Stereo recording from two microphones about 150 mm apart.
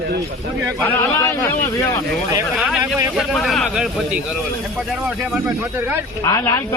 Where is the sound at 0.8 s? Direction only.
20° left (ahead or behind).